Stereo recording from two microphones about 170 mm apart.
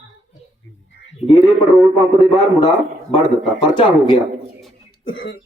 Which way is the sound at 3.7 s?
25° left (ahead or behind).